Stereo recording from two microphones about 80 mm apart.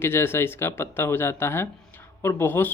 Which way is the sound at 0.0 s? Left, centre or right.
Left.